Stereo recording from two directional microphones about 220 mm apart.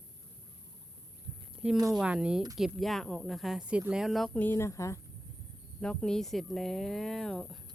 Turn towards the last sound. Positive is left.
turn(degrees=0)  # may be behind; listen again after turning